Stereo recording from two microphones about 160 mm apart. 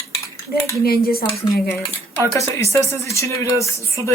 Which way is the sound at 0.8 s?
70° left (ahead or behind).